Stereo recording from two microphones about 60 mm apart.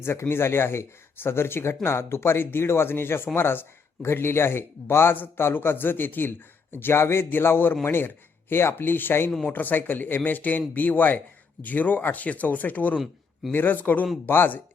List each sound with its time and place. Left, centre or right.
0.0 s speech: left